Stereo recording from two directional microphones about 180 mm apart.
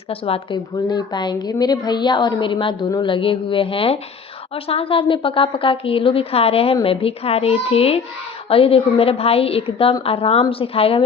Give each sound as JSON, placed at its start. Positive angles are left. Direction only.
{"t": 0.1, "sound": "a woman's voice", "side_deg": 30}